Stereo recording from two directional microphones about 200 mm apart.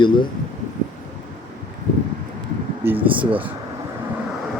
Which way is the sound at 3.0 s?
25° right (ahead or behind).